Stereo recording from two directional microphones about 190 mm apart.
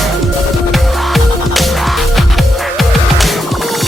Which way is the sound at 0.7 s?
Centre (ahead or behind).